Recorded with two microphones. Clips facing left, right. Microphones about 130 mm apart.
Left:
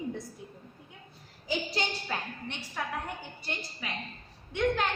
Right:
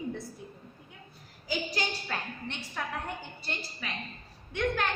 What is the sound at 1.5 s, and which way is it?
Speech, 25° left (ahead or behind).